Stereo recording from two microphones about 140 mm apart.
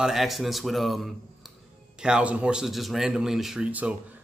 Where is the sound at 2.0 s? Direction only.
5° right (ahead or behind).